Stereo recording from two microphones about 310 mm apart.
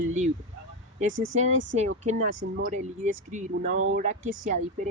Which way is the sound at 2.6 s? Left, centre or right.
Right.